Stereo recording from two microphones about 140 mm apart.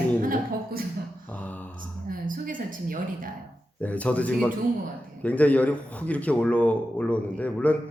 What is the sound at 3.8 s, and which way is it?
Speech, 10° left (ahead or behind).